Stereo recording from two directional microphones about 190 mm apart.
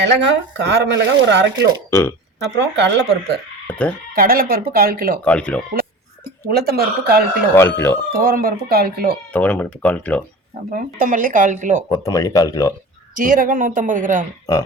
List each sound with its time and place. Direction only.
0.0 s speech: 65° right (ahead or behind)
1.9 s speech: 15° left (ahead or behind)
2.6 s speech: 65° right (ahead or behind)
3.7 s sheep: 5° left (ahead or behind)
4.1 s speech: 50° right (ahead or behind)
5.2 s speech: 5° left (ahead or behind)
6.5 s speech: 55° right (ahead or behind)
7.5 s speech: 15° left (ahead or behind)
8.1 s speech: 50° right (ahead or behind)
9.3 s speech: 10° left (ahead or behind)
10.7 s speech: 45° right (ahead or behind)
11.9 s speech: 20° left (ahead or behind)
13.1 s speech: 45° right (ahead or behind)